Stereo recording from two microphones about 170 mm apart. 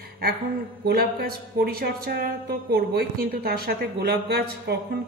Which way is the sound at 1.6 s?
60° right (ahead or behind).